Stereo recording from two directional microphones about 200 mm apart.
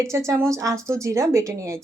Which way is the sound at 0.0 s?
15° right (ahead or behind).